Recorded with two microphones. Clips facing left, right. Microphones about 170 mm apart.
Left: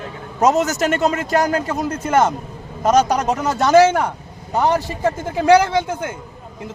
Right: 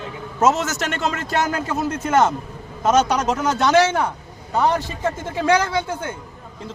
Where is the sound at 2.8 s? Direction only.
10° left (ahead or behind).